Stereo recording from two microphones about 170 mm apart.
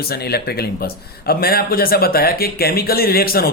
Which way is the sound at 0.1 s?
65° left (ahead or behind).